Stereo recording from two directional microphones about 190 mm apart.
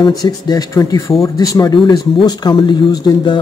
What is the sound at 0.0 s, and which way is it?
Speech, 20° left (ahead or behind).